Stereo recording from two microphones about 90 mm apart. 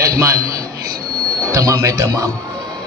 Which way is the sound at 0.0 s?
35° right (ahead or behind).